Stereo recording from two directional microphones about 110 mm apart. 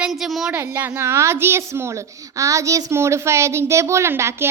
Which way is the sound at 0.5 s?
20° right (ahead or behind).